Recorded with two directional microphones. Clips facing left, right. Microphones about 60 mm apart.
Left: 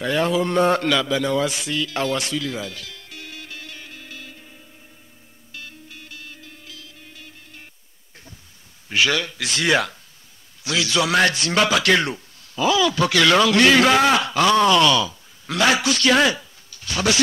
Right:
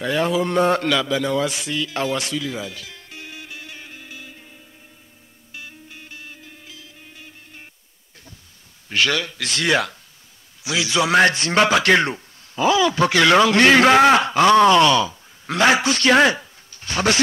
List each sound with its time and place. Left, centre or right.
0.0 s a man's voice: centre
2.9 s music: right
5.5 s music: centre
8.8 s a man's voice: centre
10.6 s a man's voice: centre; by 17.2 s right